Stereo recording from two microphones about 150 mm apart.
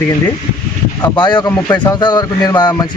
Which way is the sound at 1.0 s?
30° left (ahead or behind).